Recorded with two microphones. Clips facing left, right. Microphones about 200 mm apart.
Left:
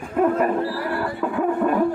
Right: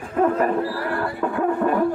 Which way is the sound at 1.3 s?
Centre (ahead or behind).